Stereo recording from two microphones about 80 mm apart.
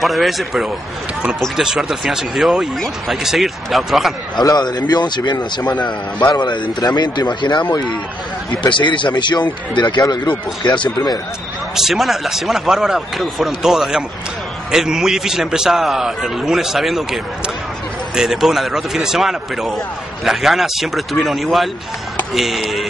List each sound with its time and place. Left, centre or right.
0.0 s a man's voice: centre
4.6 s speech: left
6.8 s speech: left
8.5 s speech: left
11.7 s a man's voice: centre